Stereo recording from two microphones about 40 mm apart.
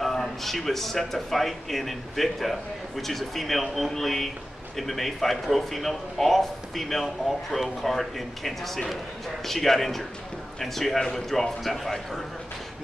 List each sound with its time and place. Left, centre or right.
0.0 s a man's voice: centre